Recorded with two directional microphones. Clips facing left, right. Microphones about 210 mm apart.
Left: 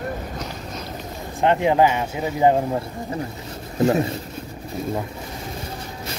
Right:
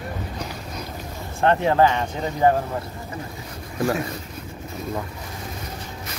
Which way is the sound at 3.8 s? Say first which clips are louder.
Left 5 dB; 25° left (ahead or behind).